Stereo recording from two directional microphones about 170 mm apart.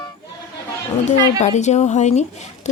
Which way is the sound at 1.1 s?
45° left (ahead or behind).